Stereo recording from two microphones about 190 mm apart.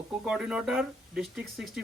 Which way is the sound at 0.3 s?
5° right (ahead or behind).